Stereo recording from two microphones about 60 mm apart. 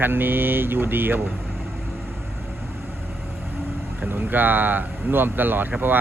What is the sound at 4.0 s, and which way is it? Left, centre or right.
Speech, right.